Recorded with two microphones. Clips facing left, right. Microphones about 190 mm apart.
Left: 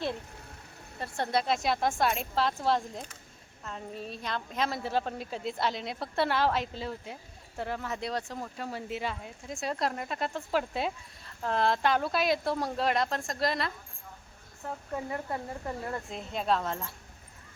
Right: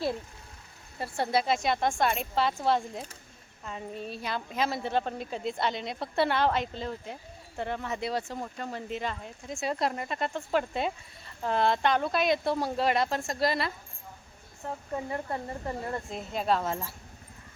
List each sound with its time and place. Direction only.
0.9 s a woman's voice: 5° right (ahead or behind)